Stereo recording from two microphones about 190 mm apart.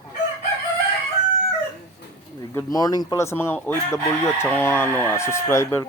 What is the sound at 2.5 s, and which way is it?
Speech, 20° left (ahead or behind).